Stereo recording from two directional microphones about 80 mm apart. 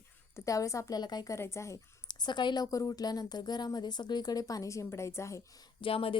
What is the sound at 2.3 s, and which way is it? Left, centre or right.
A woman's voice, left.